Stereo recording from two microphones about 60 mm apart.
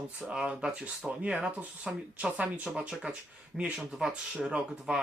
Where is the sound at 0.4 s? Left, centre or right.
Centre.